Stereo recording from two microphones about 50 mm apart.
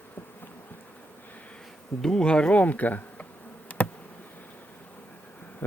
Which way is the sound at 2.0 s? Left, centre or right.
Centre.